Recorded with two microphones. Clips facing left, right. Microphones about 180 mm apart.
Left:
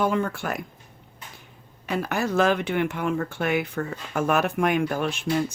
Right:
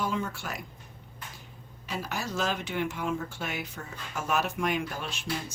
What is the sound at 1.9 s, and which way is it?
Speech, 60° left (ahead or behind).